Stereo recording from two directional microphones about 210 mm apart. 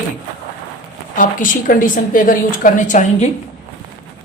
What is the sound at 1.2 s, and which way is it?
A woman's voice, 40° left (ahead or behind).